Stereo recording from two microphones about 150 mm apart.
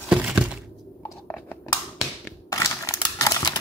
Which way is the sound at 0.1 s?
5° right (ahead or behind).